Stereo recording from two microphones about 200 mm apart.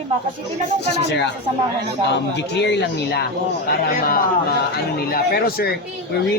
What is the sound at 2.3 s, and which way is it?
Speech, 60° left (ahead or behind).